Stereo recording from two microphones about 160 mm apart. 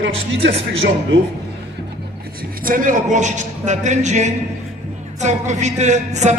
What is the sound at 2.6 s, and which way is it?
A woman's voice, 60° right (ahead or behind).